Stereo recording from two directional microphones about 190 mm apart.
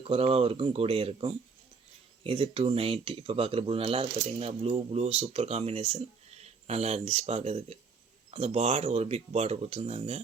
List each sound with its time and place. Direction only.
0.0 s speech: 30° right (ahead or behind)